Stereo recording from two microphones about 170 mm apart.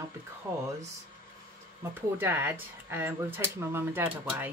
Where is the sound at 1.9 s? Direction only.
10° right (ahead or behind).